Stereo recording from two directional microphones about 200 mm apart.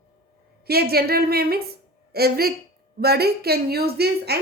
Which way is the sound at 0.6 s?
50° right (ahead or behind).